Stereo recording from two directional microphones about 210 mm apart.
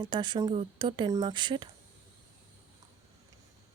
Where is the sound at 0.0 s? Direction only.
20° right (ahead or behind).